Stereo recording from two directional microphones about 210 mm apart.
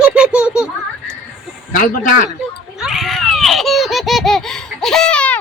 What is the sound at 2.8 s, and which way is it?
Baby laughter, centre (ahead or behind).